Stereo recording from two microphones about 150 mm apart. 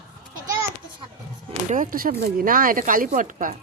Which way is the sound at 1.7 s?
65° right (ahead or behind).